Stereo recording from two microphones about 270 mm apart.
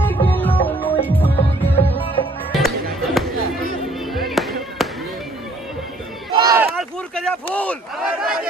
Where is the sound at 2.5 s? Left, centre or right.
Centre.